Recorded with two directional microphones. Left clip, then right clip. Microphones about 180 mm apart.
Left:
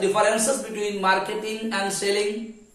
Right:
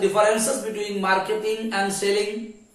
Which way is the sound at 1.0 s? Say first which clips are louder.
Right 1 dB; 20° left (ahead or behind).